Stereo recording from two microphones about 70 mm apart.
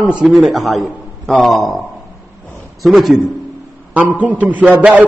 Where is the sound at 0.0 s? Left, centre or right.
Centre.